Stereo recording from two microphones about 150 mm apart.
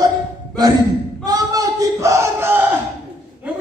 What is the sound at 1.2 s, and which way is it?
Battle cry, 25° right (ahead or behind).